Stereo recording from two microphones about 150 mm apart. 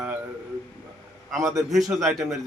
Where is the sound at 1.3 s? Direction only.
Centre (ahead or behind).